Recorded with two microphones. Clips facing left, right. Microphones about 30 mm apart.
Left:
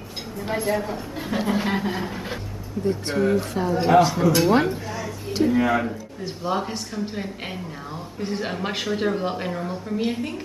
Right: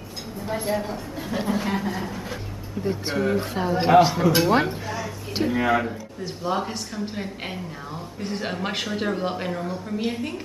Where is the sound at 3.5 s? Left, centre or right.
Centre.